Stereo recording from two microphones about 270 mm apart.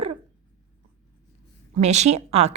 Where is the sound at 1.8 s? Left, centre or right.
Right.